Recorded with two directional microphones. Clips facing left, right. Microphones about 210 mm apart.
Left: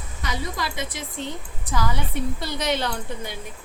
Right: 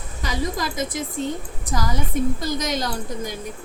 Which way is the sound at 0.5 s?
45° right (ahead or behind).